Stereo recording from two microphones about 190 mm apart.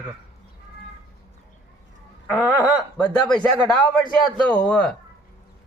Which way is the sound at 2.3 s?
Centre (ahead or behind).